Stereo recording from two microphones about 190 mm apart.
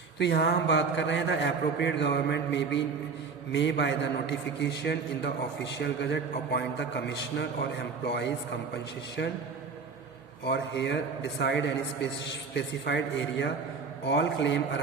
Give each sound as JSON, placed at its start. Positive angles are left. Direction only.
{"t": 0.2, "sound": "a man's voice", "side_deg": 60}
{"t": 10.4, "sound": "a man's voice", "side_deg": 65}